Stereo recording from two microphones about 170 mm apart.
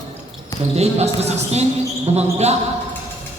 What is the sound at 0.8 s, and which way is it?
Speech, 40° right (ahead or behind).